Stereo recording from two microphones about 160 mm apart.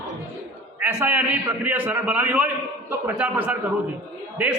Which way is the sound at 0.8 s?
10° right (ahead or behind).